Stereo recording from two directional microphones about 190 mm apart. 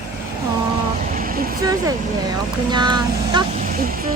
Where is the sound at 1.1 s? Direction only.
50° right (ahead or behind).